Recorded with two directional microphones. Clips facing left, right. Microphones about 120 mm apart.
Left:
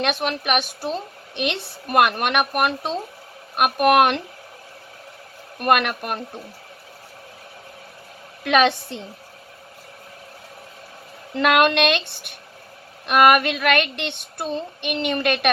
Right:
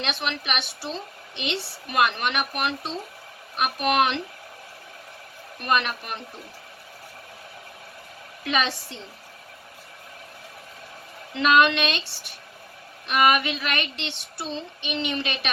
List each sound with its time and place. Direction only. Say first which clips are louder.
0.0 s a woman's voice: left 6 dB; 50° left (ahead or behind)
1.4 s child singing: left 5 dB; 55° left (ahead or behind)
5.5 s a woman's voice: left 5 dB; 60° left (ahead or behind)
8.4 s child singing: left 8 dB; 60° left (ahead or behind)
11.3 s child singing: left 2 dB; 55° left (ahead or behind)